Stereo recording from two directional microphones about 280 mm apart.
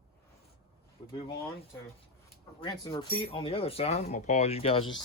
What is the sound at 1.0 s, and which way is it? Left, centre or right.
Speech, centre.